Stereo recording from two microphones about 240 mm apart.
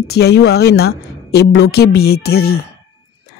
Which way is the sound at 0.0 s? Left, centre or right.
Left.